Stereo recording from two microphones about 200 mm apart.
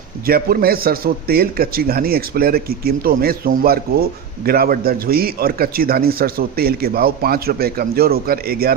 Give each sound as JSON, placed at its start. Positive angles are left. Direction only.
{"t": 0.3, "sound": "a man's voice", "side_deg": -45}